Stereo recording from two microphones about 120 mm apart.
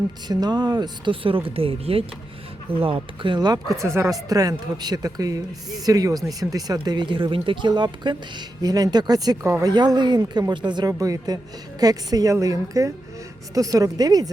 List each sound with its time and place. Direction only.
0.3 s speech: 35° right (ahead or behind)
3.8 s speech: 20° right (ahead or behind)